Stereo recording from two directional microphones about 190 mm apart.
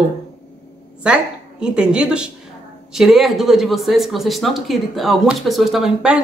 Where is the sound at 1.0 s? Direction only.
5° right (ahead or behind).